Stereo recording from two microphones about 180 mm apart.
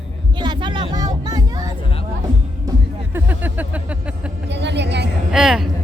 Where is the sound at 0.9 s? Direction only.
20° right (ahead or behind).